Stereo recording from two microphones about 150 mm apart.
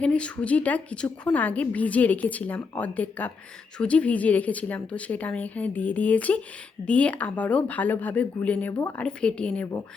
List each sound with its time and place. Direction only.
0.0 s a woman's voice: 10° left (ahead or behind)